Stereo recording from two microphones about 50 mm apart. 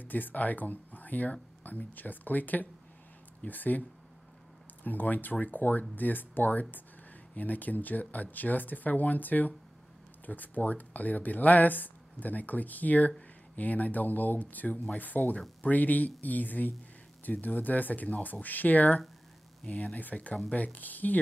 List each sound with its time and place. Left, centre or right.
0.0 s speech: left
4.8 s speech: left
19.6 s speech: centre
19.9 s speech: left